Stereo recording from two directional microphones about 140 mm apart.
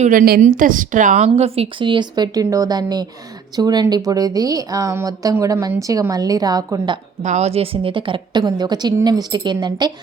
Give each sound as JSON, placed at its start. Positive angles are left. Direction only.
{"t": 0.0, "sound": "a woman's voice", "side_deg": -75}
{"t": 7.2, "sound": "a woman's voice", "side_deg": -55}